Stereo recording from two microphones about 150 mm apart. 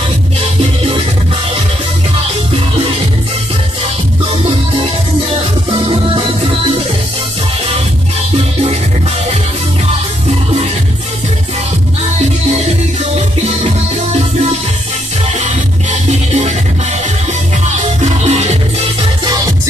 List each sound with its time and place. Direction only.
5.7 s music: 35° right (ahead or behind)
12.5 s music: 45° right (ahead or behind)
15.3 s music: 50° right (ahead or behind)
18.0 s music: 50° right (ahead or behind)
19.2 s music: 25° right (ahead or behind)